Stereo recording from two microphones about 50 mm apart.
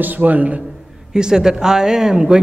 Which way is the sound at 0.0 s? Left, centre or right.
Right.